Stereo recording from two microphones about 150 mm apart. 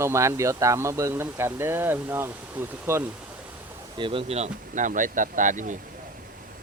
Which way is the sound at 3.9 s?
35° right (ahead or behind).